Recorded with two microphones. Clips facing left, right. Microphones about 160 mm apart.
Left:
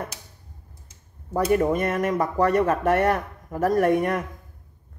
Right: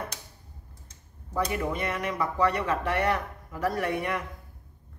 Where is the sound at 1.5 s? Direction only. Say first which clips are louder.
Left 9 dB; 45° left (ahead or behind).